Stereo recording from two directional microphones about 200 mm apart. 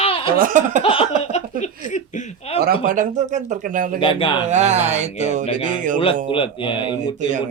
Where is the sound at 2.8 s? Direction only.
40° right (ahead or behind).